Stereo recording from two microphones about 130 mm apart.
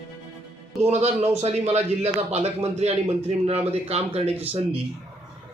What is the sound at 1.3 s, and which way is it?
A man's voice, 55° right (ahead or behind).